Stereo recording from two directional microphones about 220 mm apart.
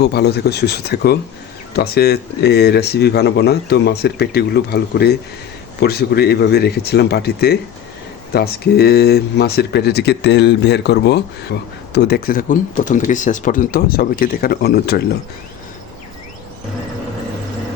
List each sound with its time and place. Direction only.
0.0 s speech: 50° left (ahead or behind)